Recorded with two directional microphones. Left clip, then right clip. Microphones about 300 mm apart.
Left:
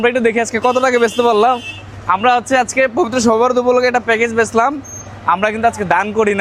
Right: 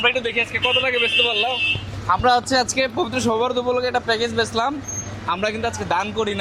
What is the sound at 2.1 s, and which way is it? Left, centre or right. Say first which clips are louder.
Speech: left 5 dB; left.